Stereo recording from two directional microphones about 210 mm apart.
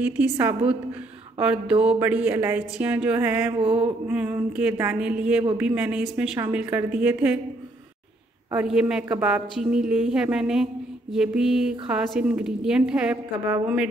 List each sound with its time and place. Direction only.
0.0 s speech: 10° right (ahead or behind)
3.5 s a sound: 25° right (ahead or behind)
4.1 s a woman's voice: 5° right (ahead or behind)
8.5 s a woman's voice: 5° right (ahead or behind)